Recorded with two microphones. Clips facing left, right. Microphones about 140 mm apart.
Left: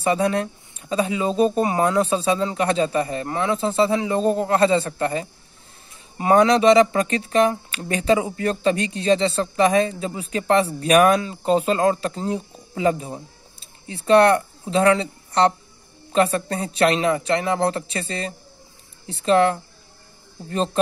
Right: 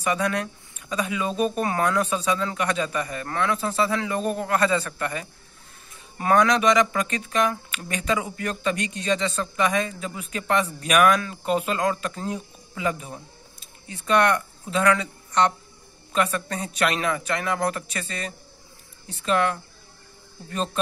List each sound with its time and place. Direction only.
0.0 s speech: 30° left (ahead or behind)